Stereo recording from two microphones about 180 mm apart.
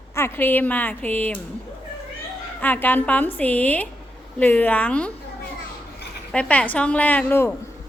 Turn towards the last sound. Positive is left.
turn(degrees=10)  # may be behind; listen again after turning